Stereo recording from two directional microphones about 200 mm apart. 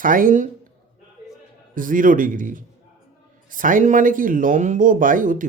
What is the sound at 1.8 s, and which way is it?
Speech, 40° right (ahead or behind).